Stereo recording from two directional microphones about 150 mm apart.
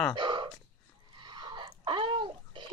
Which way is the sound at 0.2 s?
30° right (ahead or behind).